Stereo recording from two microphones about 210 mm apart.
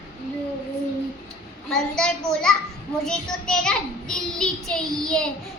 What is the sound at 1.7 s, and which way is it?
Child singing, 5° left (ahead or behind).